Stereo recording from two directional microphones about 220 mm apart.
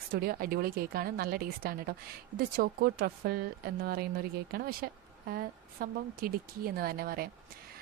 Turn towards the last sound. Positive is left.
turn(degrees=-40)  # may be behind; listen again after turning